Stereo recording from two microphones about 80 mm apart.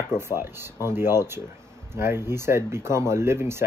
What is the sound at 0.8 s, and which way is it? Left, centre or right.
Speech, right.